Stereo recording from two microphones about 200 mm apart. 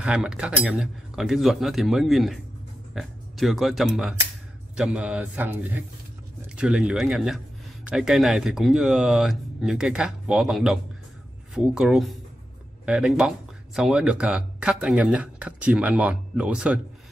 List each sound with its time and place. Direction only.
0.0 s a man's voice: 5° right (ahead or behind)